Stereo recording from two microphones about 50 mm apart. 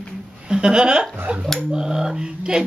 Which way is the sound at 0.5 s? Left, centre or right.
Centre.